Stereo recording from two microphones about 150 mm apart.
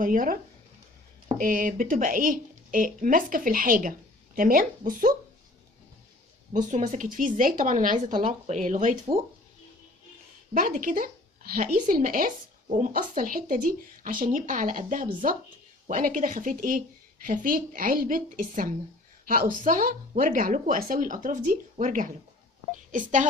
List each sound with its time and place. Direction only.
0.0 s speech: 65° right (ahead or behind)
1.4 s speech: 65° right (ahead or behind)
6.5 s speech: 55° right (ahead or behind)
10.5 s speech: 70° right (ahead or behind)